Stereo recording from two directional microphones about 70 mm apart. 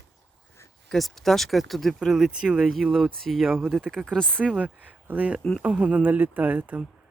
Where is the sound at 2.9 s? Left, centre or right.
Centre.